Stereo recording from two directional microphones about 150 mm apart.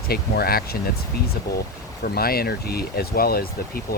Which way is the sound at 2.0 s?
90° left.